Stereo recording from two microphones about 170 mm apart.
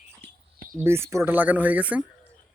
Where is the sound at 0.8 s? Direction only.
15° right (ahead or behind).